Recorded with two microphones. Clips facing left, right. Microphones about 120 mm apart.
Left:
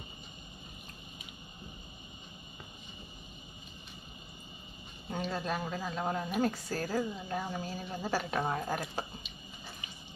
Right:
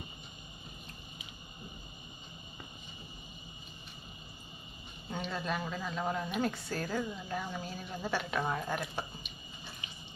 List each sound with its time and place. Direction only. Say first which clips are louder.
5.1 s a woman's voice: left 1 dB; 40° left (ahead or behind)